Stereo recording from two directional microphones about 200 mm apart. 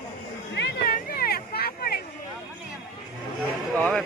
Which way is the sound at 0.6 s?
55° left (ahead or behind).